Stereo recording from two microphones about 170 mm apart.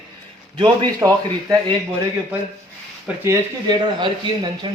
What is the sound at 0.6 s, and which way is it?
Speech, 25° right (ahead or behind).